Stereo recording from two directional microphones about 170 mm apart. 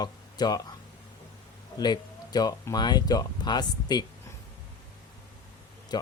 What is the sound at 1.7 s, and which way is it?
Speech, 25° left (ahead or behind).